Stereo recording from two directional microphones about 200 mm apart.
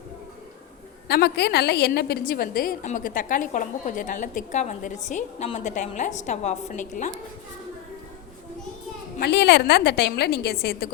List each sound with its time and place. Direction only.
1.0 s a woman's voice: 55° left (ahead or behind); by 7.1 s 40° left (ahead or behind)
9.1 s a woman's voice: 55° left (ahead or behind)